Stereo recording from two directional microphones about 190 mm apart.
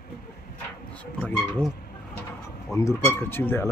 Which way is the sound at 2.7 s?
15° left (ahead or behind).